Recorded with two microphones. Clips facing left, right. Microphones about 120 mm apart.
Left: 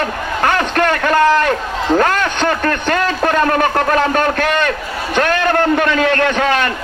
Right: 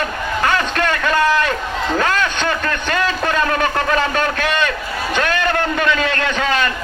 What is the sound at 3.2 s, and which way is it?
A man's voice, 45° left (ahead or behind).